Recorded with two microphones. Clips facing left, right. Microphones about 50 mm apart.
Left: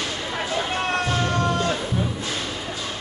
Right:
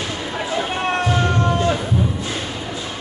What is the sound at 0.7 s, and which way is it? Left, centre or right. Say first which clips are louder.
Music: right 3 dB; right.